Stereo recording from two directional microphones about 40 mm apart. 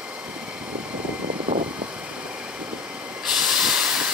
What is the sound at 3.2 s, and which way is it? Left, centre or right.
Hiss, centre.